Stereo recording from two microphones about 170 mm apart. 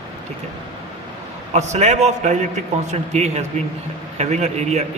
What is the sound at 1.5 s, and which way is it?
A man's voice, 40° right (ahead or behind).